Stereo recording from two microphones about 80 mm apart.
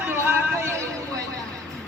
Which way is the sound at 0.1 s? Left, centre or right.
Right.